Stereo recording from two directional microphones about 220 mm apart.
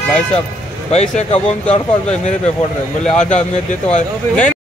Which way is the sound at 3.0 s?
5° left (ahead or behind).